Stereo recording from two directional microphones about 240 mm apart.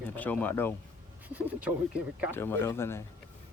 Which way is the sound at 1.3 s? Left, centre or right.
Centre.